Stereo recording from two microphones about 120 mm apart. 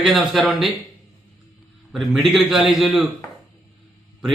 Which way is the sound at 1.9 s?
Centre (ahead or behind).